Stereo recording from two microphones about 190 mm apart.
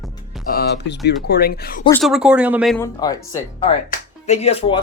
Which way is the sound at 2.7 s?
15° left (ahead or behind).